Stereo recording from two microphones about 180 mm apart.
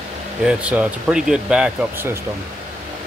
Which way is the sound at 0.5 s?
5° right (ahead or behind).